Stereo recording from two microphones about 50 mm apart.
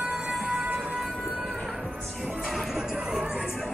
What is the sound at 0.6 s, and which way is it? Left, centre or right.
Train, right.